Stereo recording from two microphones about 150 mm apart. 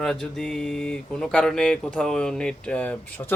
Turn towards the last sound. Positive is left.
turn(degrees=10)  # may be behind; listen again after turning